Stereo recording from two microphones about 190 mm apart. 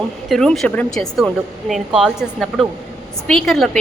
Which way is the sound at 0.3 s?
Centre (ahead or behind).